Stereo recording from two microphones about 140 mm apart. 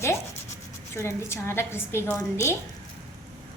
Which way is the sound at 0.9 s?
20° left (ahead or behind).